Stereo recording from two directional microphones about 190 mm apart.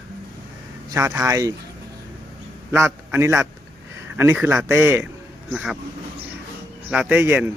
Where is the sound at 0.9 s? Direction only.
15° right (ahead or behind).